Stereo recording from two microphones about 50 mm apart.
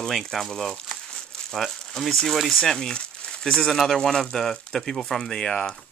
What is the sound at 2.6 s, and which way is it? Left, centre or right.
Speech, centre.